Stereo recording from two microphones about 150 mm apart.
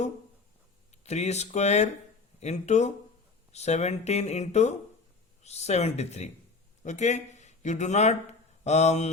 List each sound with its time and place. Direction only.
1.0 s speech: 45° left (ahead or behind)